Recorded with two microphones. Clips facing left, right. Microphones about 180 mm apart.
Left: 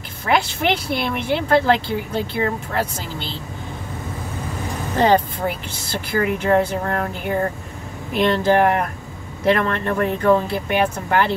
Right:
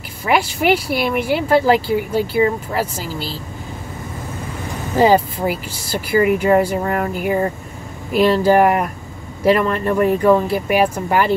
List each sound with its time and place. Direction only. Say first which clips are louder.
0.2 s speech: right 2 dB; 5° right (ahead or behind)
4.9 s speech: right 3 dB; 5° right (ahead or behind)